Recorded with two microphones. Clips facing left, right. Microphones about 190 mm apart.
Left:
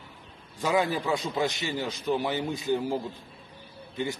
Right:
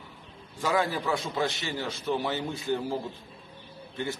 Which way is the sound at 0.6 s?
20° left (ahead or behind).